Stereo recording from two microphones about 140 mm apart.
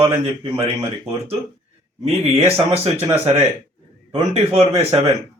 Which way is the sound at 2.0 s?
45° right (ahead or behind).